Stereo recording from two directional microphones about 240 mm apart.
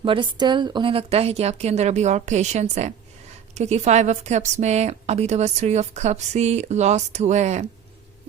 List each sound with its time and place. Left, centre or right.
0.0 s a woman's voice: right